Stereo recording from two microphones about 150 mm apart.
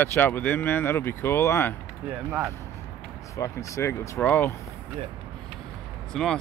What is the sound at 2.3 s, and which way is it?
Speech, 15° right (ahead or behind).